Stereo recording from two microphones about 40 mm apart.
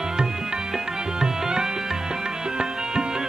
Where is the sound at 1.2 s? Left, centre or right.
Centre.